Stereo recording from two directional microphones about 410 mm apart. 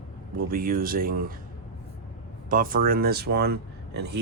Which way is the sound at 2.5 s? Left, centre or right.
Centre.